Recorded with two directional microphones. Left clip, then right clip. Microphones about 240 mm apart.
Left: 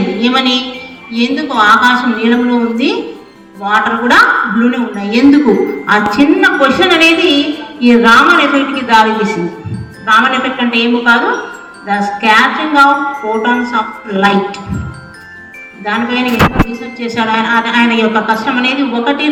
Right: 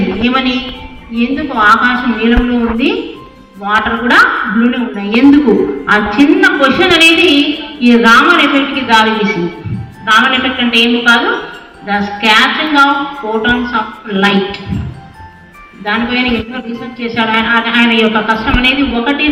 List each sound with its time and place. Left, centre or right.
0.2 s a woman's voice: right
15.8 s a woman's voice: right